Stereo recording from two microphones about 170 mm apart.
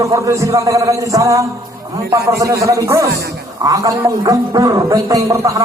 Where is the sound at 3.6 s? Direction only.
20° right (ahead or behind).